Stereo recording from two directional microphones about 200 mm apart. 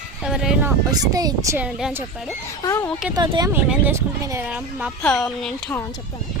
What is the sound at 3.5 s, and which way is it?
Speech, 10° right (ahead or behind).